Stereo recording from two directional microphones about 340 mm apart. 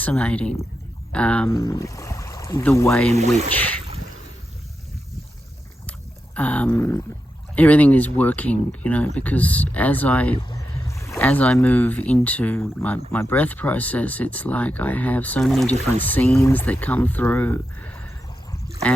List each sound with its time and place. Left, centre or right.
0.0 s speech: centre
3.1 s speech: centre
6.3 s speech: centre